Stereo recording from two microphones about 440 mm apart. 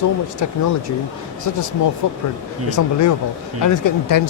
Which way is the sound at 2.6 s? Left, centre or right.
Left.